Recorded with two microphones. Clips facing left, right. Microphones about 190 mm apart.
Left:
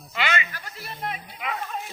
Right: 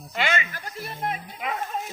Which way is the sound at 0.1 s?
45° right (ahead or behind).